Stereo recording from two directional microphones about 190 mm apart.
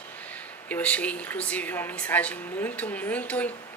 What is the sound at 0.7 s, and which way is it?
Speech, 10° left (ahead or behind).